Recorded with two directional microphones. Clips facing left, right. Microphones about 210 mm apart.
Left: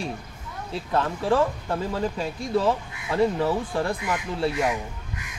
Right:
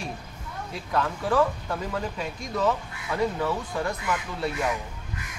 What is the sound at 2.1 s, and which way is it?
Speech, 30° left (ahead or behind).